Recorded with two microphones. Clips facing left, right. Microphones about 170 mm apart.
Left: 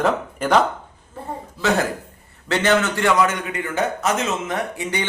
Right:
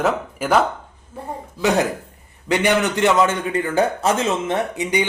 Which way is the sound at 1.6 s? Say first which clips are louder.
Right 2 dB; 15° right (ahead or behind).